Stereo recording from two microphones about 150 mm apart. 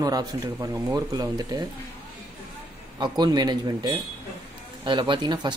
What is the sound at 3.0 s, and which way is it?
Speech, 30° right (ahead or behind).